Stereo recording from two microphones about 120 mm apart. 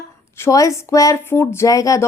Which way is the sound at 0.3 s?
25° left (ahead or behind).